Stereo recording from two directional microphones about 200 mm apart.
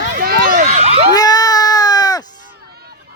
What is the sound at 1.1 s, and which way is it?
Baby cry, 20° left (ahead or behind).